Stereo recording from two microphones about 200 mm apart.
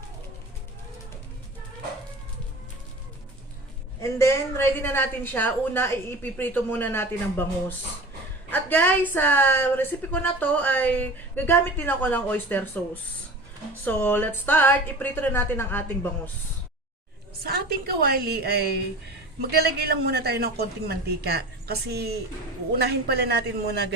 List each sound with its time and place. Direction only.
4.0 s a woman's voice: 15° left (ahead or behind)
8.4 s a woman's voice: 10° left (ahead or behind)
17.4 s speech: 50° right (ahead or behind)